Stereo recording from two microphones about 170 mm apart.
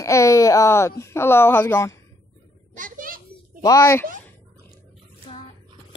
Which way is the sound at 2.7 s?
50° right (ahead or behind).